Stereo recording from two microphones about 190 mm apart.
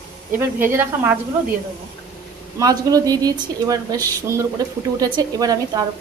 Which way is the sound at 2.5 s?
20° right (ahead or behind).